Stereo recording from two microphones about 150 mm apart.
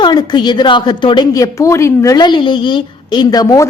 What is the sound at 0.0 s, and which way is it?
A woman's voice, 30° left (ahead or behind).